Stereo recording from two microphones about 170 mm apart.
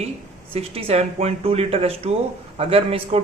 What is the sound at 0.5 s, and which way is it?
A man's voice, 35° right (ahead or behind).